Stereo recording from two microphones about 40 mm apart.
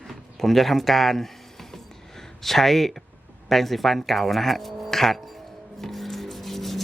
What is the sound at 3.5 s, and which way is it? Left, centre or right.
Speech, centre.